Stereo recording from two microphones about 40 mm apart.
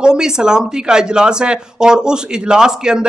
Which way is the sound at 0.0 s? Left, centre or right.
Centre.